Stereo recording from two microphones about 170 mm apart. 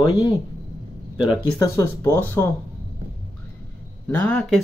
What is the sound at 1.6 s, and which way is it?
Speech, 15° left (ahead or behind).